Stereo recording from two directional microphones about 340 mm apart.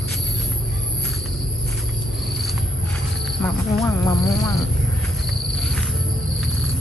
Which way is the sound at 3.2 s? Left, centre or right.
Centre.